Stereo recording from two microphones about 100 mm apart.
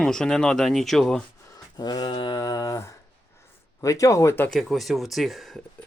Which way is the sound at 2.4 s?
40° left (ahead or behind).